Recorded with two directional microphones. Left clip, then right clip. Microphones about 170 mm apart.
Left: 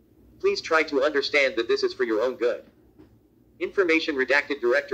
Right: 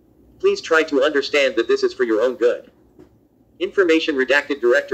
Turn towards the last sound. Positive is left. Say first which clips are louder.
# right 6 dB
turn(degrees=-20)  # may be behind; listen again after turning